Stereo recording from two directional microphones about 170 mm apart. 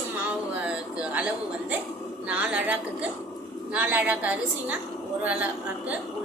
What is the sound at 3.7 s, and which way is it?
A woman's voice, 10° right (ahead or behind).